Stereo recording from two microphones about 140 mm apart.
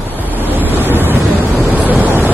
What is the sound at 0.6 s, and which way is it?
Waves, 15° right (ahead or behind).